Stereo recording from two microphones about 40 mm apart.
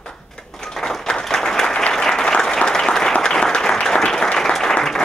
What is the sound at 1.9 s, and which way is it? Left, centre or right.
Applause, centre.